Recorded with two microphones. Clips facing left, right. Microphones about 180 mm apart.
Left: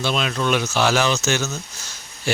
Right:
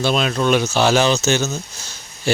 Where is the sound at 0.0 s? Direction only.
40° right (ahead or behind).